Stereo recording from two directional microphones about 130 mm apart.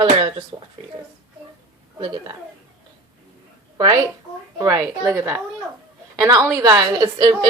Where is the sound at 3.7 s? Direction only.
30° right (ahead or behind).